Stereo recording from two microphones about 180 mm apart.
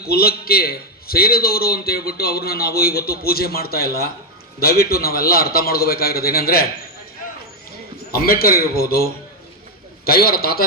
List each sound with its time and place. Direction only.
0.1 s a man's voice: 60° left (ahead or behind)
8.1 s a man's voice: 55° left (ahead or behind)